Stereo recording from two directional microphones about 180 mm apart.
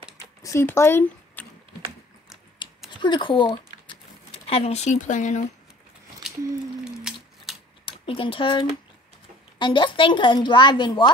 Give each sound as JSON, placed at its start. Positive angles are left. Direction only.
{"t": 0.4, "sound": "typing", "side_deg": 15}
{"t": 2.9, "sound": "speech", "side_deg": 25}
{"t": 6.8, "sound": "a sound", "side_deg": -5}
{"t": 7.5, "sound": "scissors", "side_deg": 0}
{"t": 7.8, "sound": "a woman's voice", "side_deg": 30}